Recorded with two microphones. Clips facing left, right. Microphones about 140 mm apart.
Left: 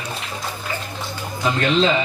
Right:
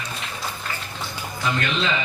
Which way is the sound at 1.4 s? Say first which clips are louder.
Left 6 dB; 35° left (ahead or behind).